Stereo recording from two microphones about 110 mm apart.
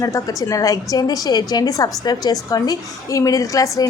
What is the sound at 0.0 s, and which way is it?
A woman's voice, 30° left (ahead or behind).